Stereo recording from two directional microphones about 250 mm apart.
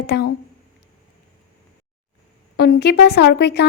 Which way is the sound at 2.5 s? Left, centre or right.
Left.